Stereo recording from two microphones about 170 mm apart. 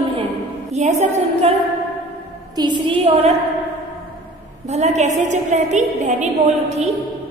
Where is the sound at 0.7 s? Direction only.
40° right (ahead or behind).